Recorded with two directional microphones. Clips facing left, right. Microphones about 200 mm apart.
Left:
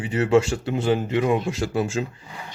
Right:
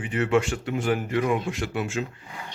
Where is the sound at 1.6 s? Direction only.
35° left (ahead or behind).